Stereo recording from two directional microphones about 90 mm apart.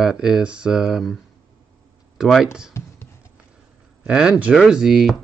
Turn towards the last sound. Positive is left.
turn(degrees=-5)  # may be behind; listen again after turning